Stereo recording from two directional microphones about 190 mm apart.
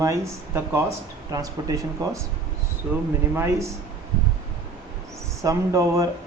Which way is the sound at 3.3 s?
15° right (ahead or behind).